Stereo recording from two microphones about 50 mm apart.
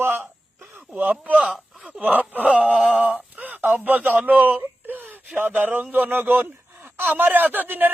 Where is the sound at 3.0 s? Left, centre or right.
Right.